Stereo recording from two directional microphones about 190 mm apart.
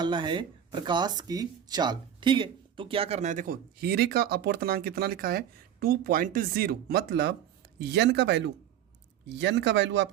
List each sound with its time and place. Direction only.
0.0 s speech: 25° right (ahead or behind); by 10.1 s 65° right (ahead or behind)